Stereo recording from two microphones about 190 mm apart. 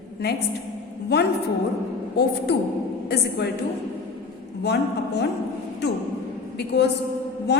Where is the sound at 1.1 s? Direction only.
60° left (ahead or behind).